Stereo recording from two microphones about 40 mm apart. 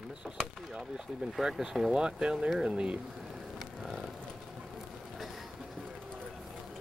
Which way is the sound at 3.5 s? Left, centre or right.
Centre.